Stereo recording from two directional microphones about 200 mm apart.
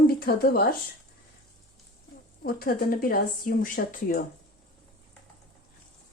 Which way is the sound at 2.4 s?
45° left (ahead or behind).